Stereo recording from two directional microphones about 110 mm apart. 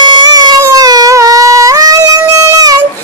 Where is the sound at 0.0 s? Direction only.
40° right (ahead or behind).